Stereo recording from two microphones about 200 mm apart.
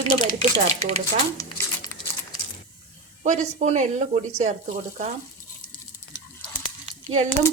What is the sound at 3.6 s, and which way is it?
Speech, 35° right (ahead or behind).